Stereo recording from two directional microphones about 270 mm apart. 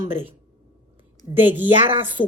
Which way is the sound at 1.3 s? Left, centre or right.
Centre.